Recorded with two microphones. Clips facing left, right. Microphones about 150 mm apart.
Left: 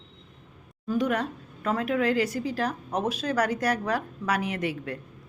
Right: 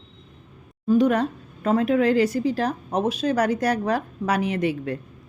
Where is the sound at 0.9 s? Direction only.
30° right (ahead or behind).